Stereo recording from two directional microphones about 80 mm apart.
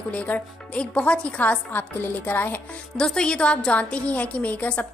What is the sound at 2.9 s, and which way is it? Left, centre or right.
A woman's voice, centre.